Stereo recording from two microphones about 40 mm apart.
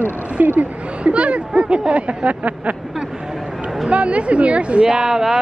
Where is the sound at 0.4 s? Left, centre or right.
Right.